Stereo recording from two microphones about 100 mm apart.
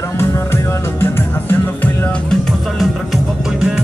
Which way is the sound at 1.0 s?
25° left (ahead or behind).